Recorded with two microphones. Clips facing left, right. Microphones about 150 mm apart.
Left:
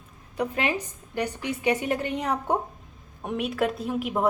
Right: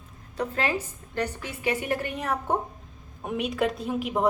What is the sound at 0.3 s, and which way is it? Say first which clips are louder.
A woman's voice: left 1 dB; 15° left (ahead or behind).